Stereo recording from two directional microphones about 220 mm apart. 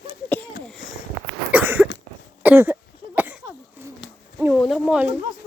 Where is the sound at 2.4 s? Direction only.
10° right (ahead or behind).